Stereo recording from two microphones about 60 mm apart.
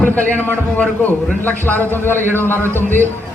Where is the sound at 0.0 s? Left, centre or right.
Left.